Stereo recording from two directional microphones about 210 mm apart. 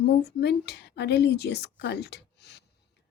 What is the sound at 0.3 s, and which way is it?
Speech, 50° left (ahead or behind).